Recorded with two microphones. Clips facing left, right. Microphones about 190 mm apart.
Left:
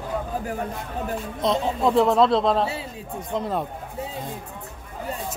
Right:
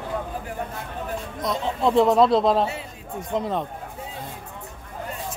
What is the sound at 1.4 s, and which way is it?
Speech, 25° left (ahead or behind).